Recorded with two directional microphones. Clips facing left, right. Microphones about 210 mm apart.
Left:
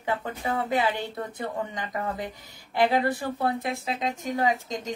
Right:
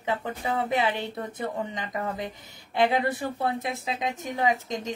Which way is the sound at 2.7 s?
20° right (ahead or behind).